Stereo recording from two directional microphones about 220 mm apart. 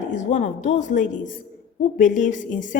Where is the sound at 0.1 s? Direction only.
35° left (ahead or behind).